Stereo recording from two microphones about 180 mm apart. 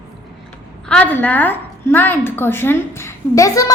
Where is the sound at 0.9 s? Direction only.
10° left (ahead or behind).